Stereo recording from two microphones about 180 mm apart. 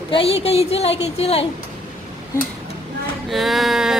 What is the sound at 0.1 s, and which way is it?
A woman's voice, 30° left (ahead or behind).